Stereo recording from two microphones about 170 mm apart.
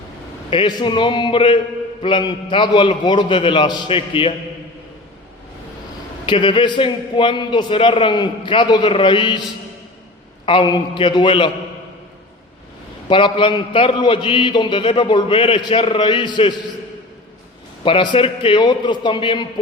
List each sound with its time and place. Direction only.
0.5 s a man's voice: 30° left (ahead or behind)
6.2 s a man's voice: 30° left (ahead or behind)
10.4 s a man's voice: 30° left (ahead or behind)
13.1 s a man's voice: 30° left (ahead or behind)
17.8 s a man's voice: 30° left (ahead or behind)